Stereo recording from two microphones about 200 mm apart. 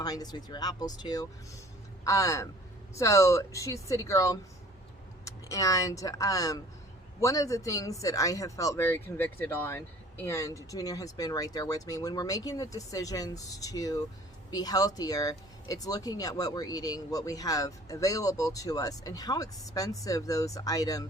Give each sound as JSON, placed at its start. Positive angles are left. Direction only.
{"t": 0.0, "sound": "speech", "side_deg": 20}